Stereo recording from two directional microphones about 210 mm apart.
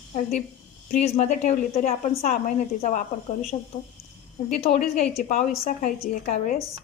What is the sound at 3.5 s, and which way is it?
Speech, 25° left (ahead or behind).